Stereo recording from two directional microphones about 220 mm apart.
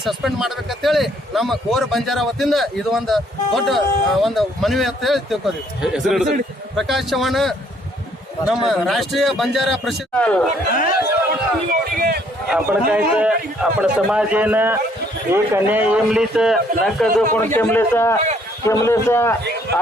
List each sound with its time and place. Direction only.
0.0 s speech: centre (ahead or behind)
11.7 s run: 40° right (ahead or behind)
12.5 s a man's voice: 5° right (ahead or behind); by 19.4 s 10° left (ahead or behind)